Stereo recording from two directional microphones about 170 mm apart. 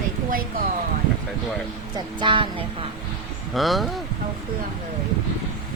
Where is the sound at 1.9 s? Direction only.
30° right (ahead or behind).